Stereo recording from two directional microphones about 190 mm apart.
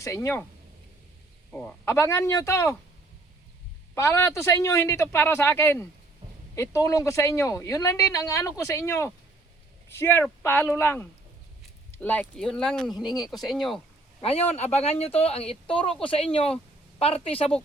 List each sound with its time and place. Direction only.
0.0 s speech: 15° left (ahead or behind)
1.5 s speech: 5° left (ahead or behind)
3.9 s speech: 15° left (ahead or behind)
13.1 s speech: 20° left (ahead or behind)
13.3 s speech: centre (ahead or behind)
14.2 s speech: 30° left (ahead or behind)